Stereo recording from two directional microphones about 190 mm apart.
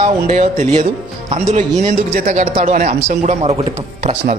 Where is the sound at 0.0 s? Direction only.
35° right (ahead or behind).